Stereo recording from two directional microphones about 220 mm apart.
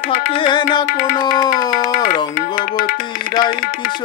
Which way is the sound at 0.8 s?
40° left (ahead or behind).